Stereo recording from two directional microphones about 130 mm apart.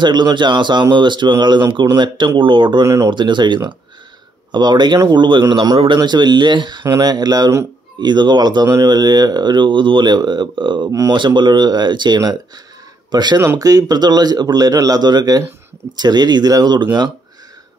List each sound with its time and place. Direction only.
0.0 s a man's voice: 35° right (ahead or behind)
2.8 s a man's voice: 25° right (ahead or behind)
3.1 s a man's voice: 35° right (ahead or behind)
10.9 s a man's voice: 25° right (ahead or behind)
11.1 s a man's voice: 35° right (ahead or behind)